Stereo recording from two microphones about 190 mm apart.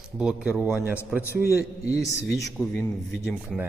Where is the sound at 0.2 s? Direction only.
5° right (ahead or behind).